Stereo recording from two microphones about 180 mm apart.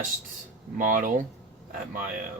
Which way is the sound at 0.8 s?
45° right (ahead or behind).